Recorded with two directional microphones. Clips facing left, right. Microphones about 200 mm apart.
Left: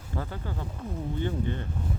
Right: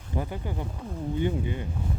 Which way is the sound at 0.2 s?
15° right (ahead or behind).